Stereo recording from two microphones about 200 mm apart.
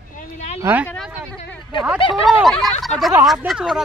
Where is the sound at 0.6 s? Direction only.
10° right (ahead or behind).